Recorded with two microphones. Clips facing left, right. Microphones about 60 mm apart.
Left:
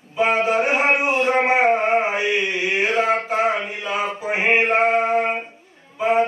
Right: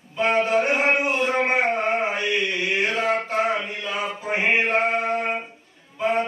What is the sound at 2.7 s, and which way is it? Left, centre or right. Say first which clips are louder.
Mantra: left 4 dB; centre.